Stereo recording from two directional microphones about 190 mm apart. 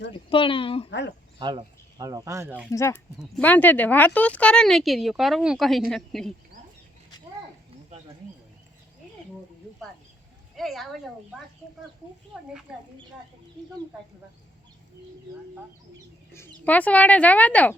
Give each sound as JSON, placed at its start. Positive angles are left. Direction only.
{"t": 0.3, "sound": "speech", "side_deg": 25}
{"t": 0.9, "sound": "speech", "side_deg": 70}
{"t": 1.4, "sound": "speech", "side_deg": -25}
{"t": 2.7, "sound": "speech", "side_deg": 10}
{"t": 10.5, "sound": "speech", "side_deg": 0}
{"t": 16.6, "sound": "speech", "side_deg": 10}